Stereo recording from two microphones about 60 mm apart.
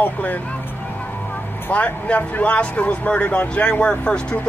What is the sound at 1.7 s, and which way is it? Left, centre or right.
Speech, left.